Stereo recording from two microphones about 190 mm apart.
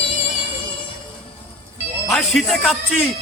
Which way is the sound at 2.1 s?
Centre (ahead or behind).